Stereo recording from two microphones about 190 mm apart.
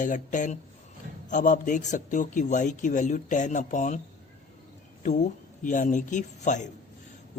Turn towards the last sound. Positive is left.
turn(degrees=40)  # may be behind; listen again after turning